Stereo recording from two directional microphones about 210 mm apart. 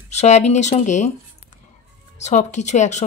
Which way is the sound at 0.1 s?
30° left (ahead or behind).